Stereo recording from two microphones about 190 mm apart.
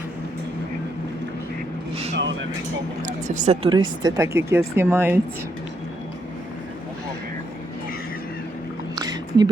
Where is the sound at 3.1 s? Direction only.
40° right (ahead or behind); by 5.2 s 10° right (ahead or behind).